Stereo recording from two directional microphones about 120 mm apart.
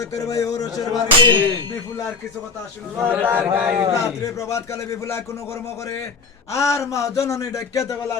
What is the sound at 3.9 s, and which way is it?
A man's voice, 25° left (ahead or behind).